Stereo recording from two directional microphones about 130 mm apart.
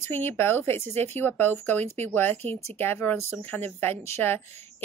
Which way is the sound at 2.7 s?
15° left (ahead or behind).